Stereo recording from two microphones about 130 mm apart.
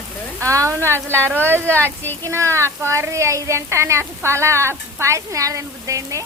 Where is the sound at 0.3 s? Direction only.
25° right (ahead or behind).